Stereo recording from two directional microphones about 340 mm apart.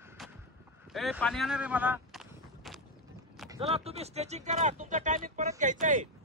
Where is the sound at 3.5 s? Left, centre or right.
Centre.